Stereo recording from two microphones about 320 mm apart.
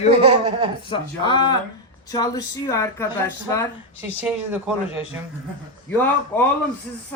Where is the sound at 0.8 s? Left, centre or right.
Centre.